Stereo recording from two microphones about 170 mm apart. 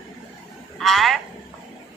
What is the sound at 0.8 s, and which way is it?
Speech, centre (ahead or behind).